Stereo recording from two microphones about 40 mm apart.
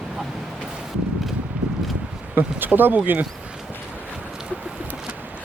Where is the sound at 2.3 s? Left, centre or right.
Right.